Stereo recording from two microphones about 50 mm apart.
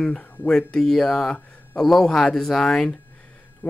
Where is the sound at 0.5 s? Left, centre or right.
Centre.